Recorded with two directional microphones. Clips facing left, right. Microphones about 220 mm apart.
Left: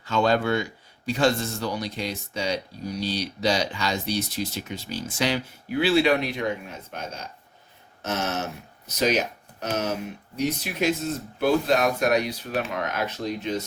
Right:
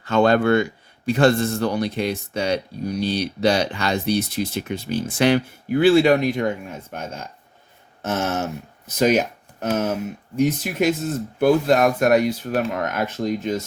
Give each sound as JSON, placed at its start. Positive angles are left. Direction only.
{"t": 0.0, "sound": "speech", "side_deg": -60}